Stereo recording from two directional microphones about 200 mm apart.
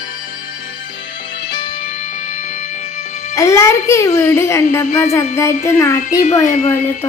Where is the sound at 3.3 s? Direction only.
15° left (ahead or behind).